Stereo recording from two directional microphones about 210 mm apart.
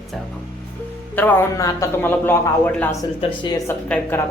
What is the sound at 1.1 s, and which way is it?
A man's voice, 10° left (ahead or behind).